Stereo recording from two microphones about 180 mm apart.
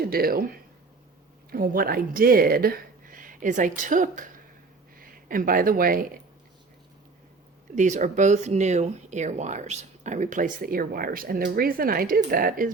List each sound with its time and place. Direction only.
0.0 s speech: 55° right (ahead or behind)
7.8 s speech: 40° right (ahead or behind)